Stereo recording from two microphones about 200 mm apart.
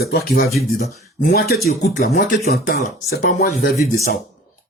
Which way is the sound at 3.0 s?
40° left (ahead or behind).